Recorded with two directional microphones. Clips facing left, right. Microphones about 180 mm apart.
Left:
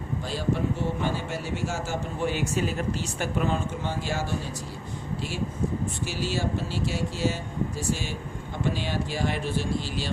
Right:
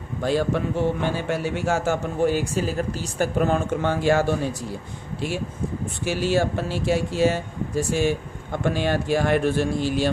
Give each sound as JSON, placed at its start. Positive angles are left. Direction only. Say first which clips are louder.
{"t": 0.2, "sound": "speech", "louder": "right 7 dB", "side_deg": -60}
{"t": 2.2, "sound": "speech", "louder": "right 5 dB", "side_deg": -40}
{"t": 6.1, "sound": "speech", "louder": "right 10 dB", "side_deg": -55}